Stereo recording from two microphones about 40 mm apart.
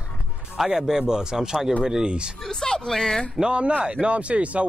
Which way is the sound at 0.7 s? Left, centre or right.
Centre.